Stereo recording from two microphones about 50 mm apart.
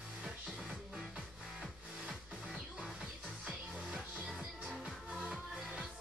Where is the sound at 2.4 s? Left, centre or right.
Centre.